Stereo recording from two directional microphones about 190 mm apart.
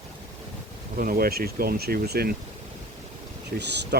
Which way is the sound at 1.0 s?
50° right (ahead or behind).